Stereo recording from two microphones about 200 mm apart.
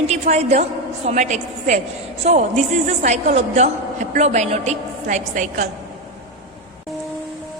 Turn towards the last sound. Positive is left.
turn(degrees=-40)  # may be behind; listen again after turning